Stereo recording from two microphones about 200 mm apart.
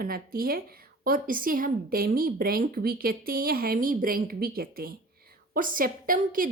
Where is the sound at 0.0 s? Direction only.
45° right (ahead or behind).